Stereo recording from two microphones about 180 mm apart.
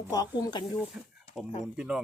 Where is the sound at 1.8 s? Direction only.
5° right (ahead or behind).